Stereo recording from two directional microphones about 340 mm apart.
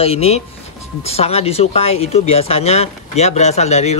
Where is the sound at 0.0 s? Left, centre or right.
Centre.